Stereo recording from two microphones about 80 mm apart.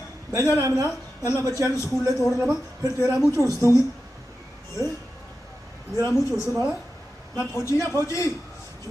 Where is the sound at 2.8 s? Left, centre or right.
Right.